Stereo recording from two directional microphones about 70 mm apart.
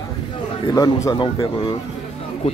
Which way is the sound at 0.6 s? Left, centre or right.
Left.